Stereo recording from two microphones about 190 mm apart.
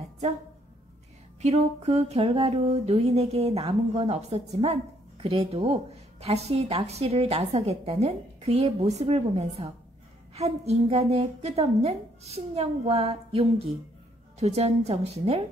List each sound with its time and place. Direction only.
1.4 s a woman's voice: 35° right (ahead or behind)